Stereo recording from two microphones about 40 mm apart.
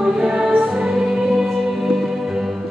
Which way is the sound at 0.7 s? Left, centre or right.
Centre.